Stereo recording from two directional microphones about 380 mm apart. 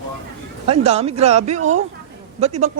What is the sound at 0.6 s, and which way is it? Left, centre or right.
A man's voice, centre.